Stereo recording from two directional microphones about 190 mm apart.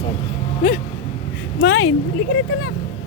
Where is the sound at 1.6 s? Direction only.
80° left.